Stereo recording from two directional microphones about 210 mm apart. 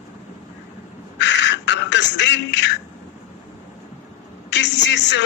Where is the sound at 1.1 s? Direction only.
55° left (ahead or behind).